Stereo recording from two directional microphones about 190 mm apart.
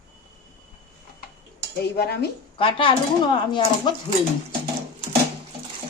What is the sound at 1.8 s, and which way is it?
Speech, 60° left (ahead or behind).